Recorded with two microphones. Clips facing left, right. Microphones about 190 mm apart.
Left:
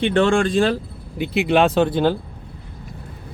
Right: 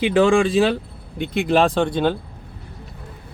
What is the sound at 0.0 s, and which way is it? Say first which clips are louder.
Speech: right 1 dB; 5° right (ahead or behind).